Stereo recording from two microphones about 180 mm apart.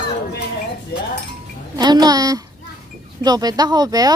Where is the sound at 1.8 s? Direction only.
20° right (ahead or behind).